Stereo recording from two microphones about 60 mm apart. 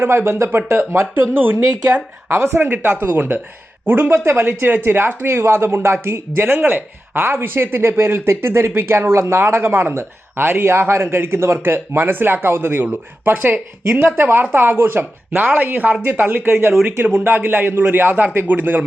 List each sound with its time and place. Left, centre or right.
0.0 s speech: right
15.4 s speech: right